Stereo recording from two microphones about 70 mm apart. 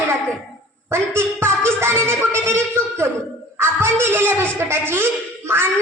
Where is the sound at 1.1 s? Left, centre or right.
Right.